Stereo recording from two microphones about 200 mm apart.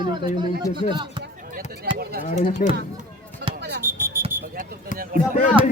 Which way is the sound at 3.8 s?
10° right (ahead or behind).